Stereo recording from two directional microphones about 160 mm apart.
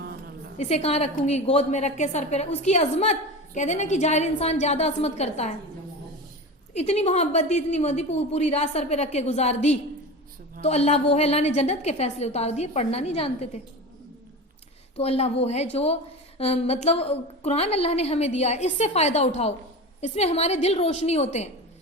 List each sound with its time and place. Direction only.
0.5 s a woman's voice: 45° left (ahead or behind)
6.7 s a woman's voice: 40° left (ahead or behind)
14.9 s a woman's voice: 40° left (ahead or behind)